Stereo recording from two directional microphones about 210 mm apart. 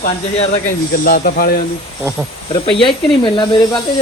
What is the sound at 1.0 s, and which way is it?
Speech, 45° left (ahead or behind).